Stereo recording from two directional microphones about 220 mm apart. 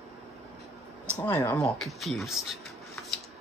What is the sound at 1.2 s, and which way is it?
Speech, 10° left (ahead or behind).